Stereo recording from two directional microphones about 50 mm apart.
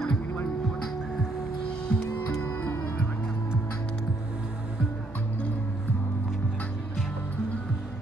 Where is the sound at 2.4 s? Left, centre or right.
Left.